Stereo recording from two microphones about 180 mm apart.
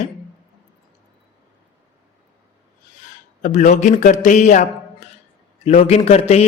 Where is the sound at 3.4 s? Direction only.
40° left (ahead or behind).